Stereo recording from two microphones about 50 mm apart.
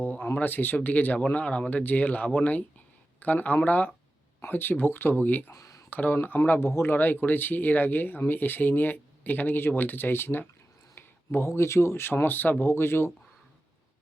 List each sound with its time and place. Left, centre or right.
0.0 s a sound: left
0.3 s speech: left
1.8 s speech: left
6.6 s speech: left
10.9 s a sound: left
11.4 s speech: left
12.6 s speech: left